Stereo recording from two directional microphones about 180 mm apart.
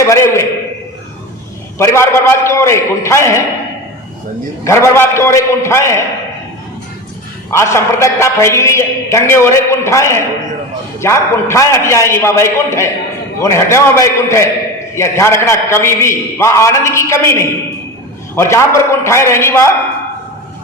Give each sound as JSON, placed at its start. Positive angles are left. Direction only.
{"t": 0.0, "sound": "a sound", "side_deg": 15}
{"t": 1.8, "sound": "a man's voice", "side_deg": 15}
{"t": 4.6, "sound": "a man's voice", "side_deg": 15}
{"t": 7.5, "sound": "a man's voice", "side_deg": 15}